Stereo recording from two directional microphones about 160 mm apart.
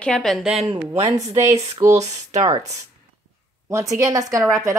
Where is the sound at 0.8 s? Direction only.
15° right (ahead or behind).